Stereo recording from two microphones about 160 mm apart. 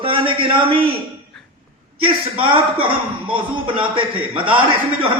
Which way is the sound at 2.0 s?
35° right (ahead or behind).